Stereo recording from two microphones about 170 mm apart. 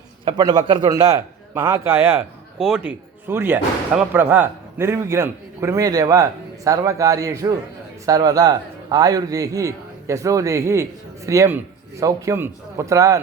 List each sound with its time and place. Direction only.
0.3 s a man's voice: 25° right (ahead or behind)